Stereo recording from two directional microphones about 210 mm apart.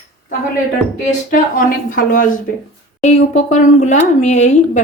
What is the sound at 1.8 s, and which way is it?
A woman's voice, 40° left (ahead or behind).